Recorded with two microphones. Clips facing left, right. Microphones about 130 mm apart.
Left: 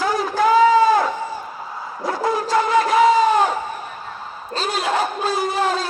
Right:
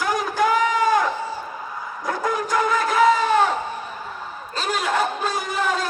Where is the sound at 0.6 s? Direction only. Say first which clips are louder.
Left 6 dB; 35° left (ahead or behind).